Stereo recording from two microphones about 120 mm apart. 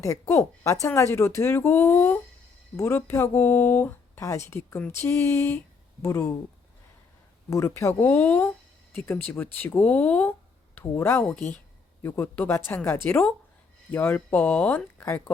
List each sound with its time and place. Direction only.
0.0 s speech: 25° left (ahead or behind)
7.5 s speech: 25° left (ahead or behind)